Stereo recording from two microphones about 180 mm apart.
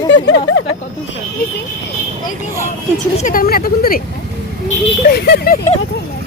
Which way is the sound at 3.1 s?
50° left (ahead or behind).